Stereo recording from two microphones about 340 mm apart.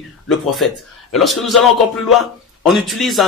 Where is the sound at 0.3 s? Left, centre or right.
Centre.